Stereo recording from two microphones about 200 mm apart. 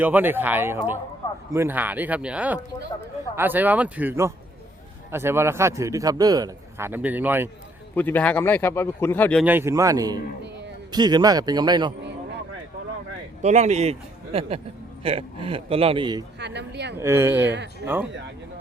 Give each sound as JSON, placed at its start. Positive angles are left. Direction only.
{"t": 0.0, "sound": "a man's voice", "side_deg": -10}
{"t": 7.9, "sound": "speech", "side_deg": 10}
{"t": 9.4, "sound": "a man's voice", "side_deg": -10}
{"t": 13.4, "sound": "speech", "side_deg": -35}
{"t": 15.0, "sound": "a man's voice", "side_deg": -30}
{"t": 16.4, "sound": "speech", "side_deg": -60}
{"t": 17.0, "sound": "a man's voice", "side_deg": -10}
{"t": 17.4, "sound": "speech", "side_deg": -60}